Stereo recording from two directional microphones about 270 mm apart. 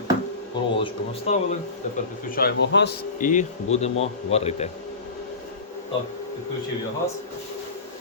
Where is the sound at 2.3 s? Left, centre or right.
Left.